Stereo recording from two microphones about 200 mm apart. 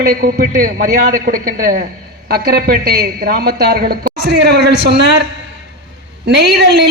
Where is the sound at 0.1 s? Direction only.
45° right (ahead or behind).